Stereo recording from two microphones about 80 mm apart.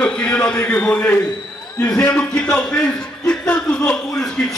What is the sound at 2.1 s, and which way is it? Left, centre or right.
A man's voice, centre.